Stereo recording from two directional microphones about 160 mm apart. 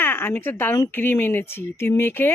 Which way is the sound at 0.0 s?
15° left (ahead or behind).